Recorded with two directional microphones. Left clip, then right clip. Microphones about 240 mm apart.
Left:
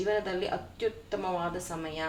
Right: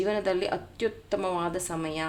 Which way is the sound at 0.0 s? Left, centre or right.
Right.